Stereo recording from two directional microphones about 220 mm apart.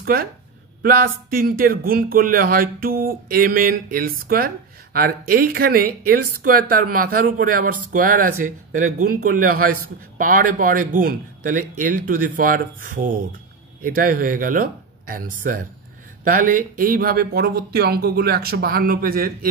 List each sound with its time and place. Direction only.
0.0 s speech: 40° right (ahead or behind)